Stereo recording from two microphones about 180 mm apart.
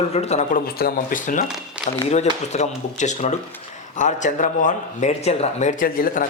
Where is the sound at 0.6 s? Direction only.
55° left (ahead or behind).